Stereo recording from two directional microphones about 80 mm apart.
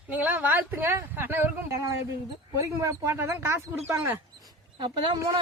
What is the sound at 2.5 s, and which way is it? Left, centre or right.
Speech, right.